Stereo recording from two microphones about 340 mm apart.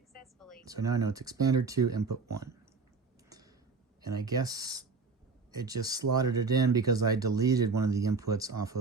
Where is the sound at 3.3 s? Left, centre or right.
Centre.